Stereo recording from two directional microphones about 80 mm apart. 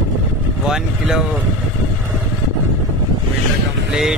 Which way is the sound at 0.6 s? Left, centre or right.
Centre.